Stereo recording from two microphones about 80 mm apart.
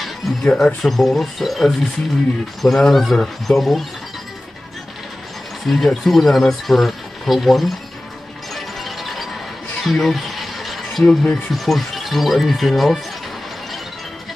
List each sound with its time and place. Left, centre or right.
0.0 s music: centre
0.8 s speech: centre
5.7 s speech: centre
8.5 s music: centre
9.8 s a sound: centre
11.5 s speech: centre